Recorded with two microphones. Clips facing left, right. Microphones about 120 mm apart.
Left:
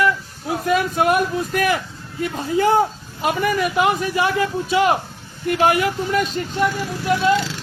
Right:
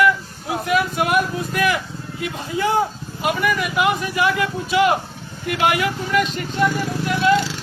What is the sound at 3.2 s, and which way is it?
Speech, 35° left (ahead or behind).